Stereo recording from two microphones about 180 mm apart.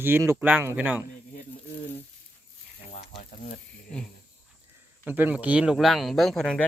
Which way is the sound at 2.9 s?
35° left (ahead or behind).